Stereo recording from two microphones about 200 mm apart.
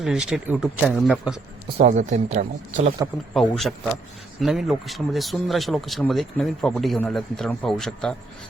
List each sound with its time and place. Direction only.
0.0 s speech: 5° right (ahead or behind)
1.8 s a man's voice: 40° right (ahead or behind)
3.0 s speech: 10° right (ahead or behind)
3.3 s speech: centre (ahead or behind)